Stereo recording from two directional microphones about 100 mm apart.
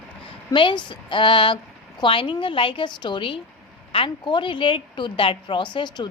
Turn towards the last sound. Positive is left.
turn(degrees=50)  # may be behind; listen again after turning